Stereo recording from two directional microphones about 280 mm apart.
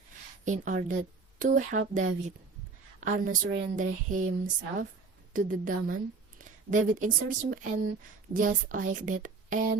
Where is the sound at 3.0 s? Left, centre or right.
Right.